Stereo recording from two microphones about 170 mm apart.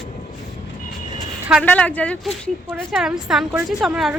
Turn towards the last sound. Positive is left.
turn(degrees=0)  # may be behind; listen again after turning